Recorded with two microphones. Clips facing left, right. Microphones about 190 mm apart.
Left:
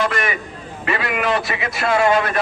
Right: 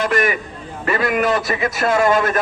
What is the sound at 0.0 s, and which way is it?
A man's voice, 40° right (ahead or behind).